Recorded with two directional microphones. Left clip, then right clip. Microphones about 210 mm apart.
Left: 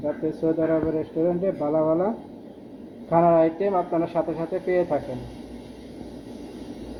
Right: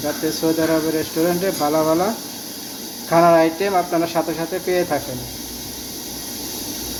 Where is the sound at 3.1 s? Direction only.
5° right (ahead or behind).